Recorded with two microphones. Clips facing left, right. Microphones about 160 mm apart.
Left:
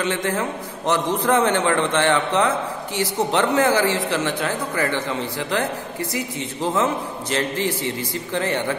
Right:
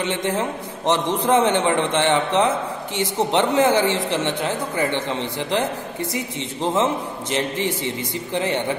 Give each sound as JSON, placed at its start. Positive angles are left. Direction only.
{"t": 0.0, "sound": "a man's voice", "side_deg": -20}